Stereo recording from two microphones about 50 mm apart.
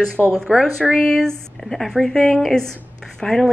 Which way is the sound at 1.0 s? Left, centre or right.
Centre.